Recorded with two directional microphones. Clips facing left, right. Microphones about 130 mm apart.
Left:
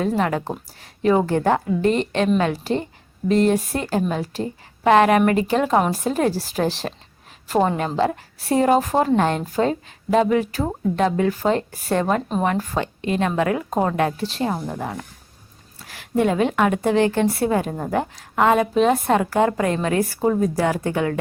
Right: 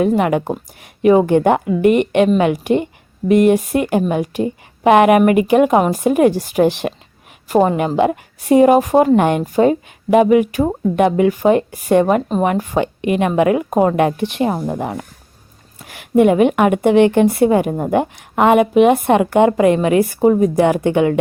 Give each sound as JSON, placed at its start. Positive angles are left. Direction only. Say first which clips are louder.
{"t": 0.2, "sound": "a woman's voice", "louder": "right 6 dB", "side_deg": -15}